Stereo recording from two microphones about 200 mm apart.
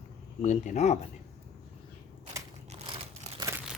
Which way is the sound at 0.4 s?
35° left (ahead or behind).